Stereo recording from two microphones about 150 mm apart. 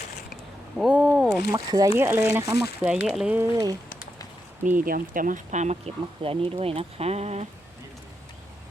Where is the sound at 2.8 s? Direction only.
5° right (ahead or behind).